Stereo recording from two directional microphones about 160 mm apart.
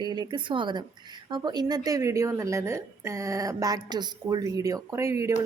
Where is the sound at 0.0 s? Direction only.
25° right (ahead or behind).